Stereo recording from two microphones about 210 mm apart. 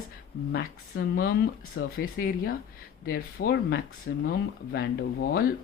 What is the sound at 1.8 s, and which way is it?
Speech, 75° left (ahead or behind).